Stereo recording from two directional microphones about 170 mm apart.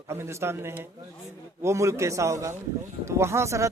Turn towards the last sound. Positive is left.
turn(degrees=-15)  # may be behind; listen again after turning